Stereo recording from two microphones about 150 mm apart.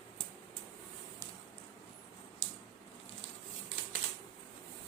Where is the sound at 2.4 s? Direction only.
40° left (ahead or behind).